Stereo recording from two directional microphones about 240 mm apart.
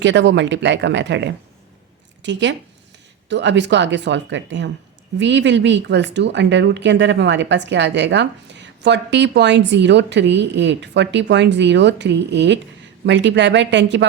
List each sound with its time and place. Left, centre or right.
0.0 s a woman's voice: right